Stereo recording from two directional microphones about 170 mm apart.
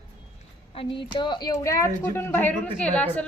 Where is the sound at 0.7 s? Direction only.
30° left (ahead or behind).